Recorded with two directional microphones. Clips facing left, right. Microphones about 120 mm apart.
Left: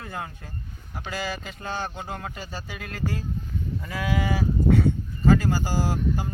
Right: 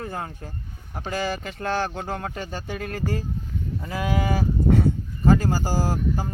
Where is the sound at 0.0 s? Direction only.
35° right (ahead or behind).